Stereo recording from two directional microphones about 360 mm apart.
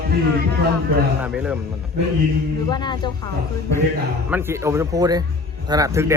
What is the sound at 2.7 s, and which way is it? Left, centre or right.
Speech, centre.